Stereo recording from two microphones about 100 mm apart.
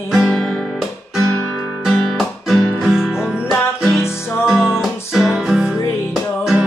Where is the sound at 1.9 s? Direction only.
Centre (ahead or behind).